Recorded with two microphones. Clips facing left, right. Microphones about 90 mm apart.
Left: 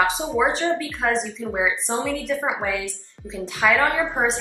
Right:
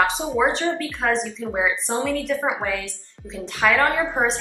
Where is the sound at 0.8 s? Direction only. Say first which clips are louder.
Even; centre (ahead or behind).